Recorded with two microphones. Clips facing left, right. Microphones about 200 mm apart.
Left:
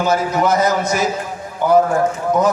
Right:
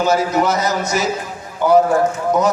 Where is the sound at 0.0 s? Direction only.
50° left (ahead or behind).